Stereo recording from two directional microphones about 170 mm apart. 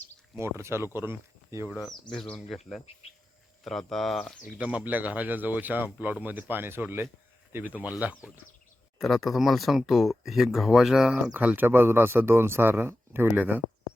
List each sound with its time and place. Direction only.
0.3 s speech: 15° right (ahead or behind)
1.7 s speech: centre (ahead or behind)
3.6 s speech: centre (ahead or behind)